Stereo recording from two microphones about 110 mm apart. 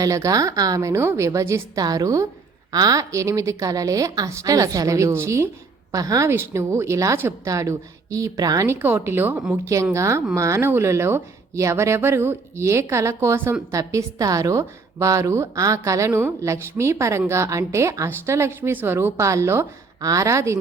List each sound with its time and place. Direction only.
0.0 s a woman's voice: 30° right (ahead or behind)
8.6 s speech: 20° right (ahead or behind)